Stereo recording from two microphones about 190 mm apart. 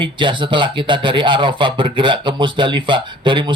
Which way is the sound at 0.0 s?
25° right (ahead or behind).